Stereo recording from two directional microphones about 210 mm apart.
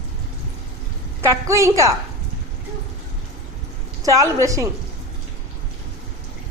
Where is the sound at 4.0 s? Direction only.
15° right (ahead or behind).